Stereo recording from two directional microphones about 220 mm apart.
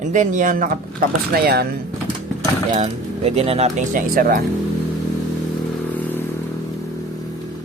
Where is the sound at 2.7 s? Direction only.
30° right (ahead or behind).